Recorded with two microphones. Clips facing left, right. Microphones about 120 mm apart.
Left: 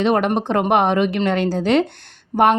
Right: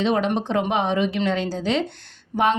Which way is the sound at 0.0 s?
55° left (ahead or behind).